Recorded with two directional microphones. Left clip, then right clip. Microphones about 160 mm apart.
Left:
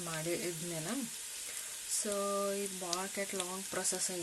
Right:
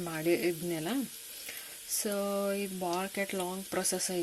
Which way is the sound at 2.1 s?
25° right (ahead or behind).